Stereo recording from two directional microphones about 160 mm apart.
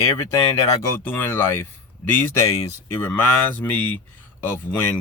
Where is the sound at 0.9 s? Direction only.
15° left (ahead or behind).